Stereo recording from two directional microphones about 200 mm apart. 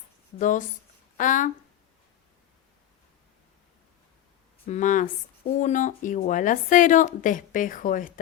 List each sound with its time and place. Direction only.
0.3 s speech: 40° left (ahead or behind)
4.6 s speech: 35° left (ahead or behind)